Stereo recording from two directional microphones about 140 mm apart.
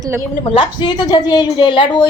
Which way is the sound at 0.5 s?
35° left (ahead or behind).